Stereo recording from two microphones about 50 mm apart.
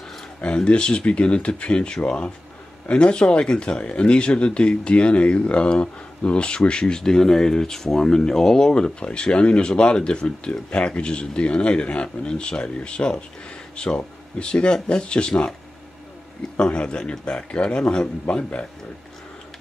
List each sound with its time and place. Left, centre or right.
0.4 s speech: left
16.5 s speech: centre